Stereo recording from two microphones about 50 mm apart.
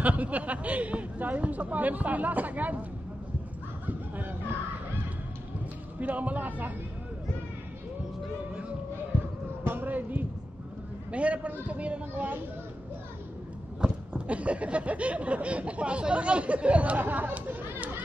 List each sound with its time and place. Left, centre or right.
0.0 s speech: right
3.8 s a sound: right
5.9 s speech: right
9.7 s speech: right
11.1 s speech: right
13.7 s speech: right